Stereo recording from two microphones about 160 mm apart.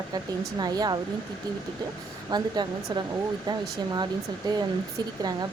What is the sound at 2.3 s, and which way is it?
Speech, 25° right (ahead or behind).